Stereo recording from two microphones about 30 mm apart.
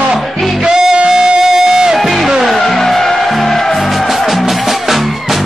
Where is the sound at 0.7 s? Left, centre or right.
Centre.